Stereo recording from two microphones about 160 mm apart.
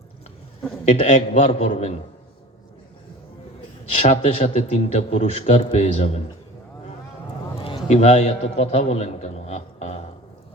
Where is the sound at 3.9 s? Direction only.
40° left (ahead or behind).